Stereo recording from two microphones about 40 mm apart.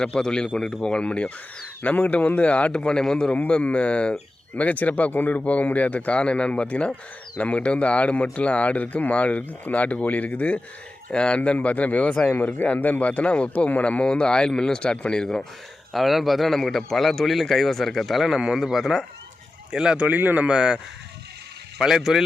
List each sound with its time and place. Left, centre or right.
0.0 s a man's voice: centre
3.4 s speech: left
11.5 s speech: left
12.3 s speech: left
14.0 s speech: left
15.9 s speech: centre
18.2 s speech: centre
19.7 s speech: centre
20.1 s speech: right
20.5 s speech: centre
21.8 s speech: centre